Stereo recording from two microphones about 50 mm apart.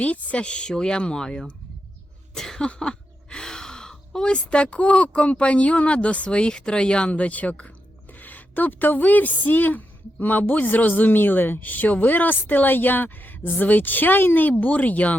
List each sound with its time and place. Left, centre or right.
0.0 s speech: left
2.3 s throat clearing: centre
2.6 s a woman's voice: centre